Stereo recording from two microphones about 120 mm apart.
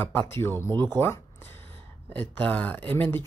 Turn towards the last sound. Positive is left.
turn(degrees=15)  # may be behind; listen again after turning